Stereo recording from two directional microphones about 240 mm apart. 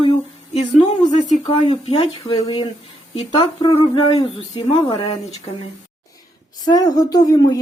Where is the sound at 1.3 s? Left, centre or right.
Left.